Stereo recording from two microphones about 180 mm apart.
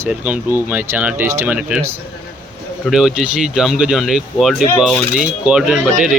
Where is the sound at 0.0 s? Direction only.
10° right (ahead or behind).